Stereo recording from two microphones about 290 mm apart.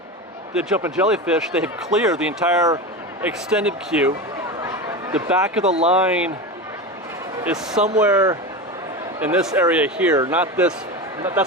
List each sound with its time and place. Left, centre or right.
0.5 s a man's voice: centre
4.6 s a sound: centre
5.6 s speech: right
5.9 s a man's voice: centre
7.4 s a man's voice: centre